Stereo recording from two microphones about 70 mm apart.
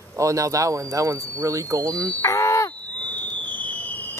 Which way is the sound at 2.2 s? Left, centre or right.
Left.